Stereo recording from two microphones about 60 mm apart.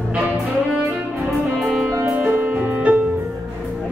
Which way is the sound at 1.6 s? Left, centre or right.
Centre.